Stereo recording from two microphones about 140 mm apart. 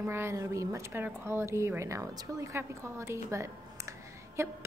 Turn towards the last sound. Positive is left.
turn(degrees=-20)  # may be behind; listen again after turning